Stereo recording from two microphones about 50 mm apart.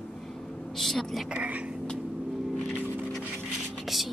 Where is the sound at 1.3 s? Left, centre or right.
Right.